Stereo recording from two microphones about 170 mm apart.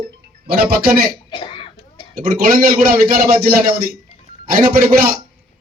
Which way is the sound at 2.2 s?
60° right (ahead or behind).